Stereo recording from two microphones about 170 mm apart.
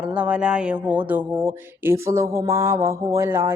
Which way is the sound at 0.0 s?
5° right (ahead or behind).